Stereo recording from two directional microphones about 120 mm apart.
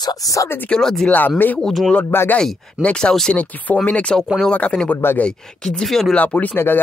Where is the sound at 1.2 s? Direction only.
15° left (ahead or behind).